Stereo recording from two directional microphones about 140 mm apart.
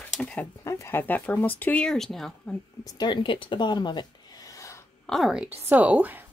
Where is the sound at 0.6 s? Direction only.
20° left (ahead or behind); by 2.5 s 5° left (ahead or behind).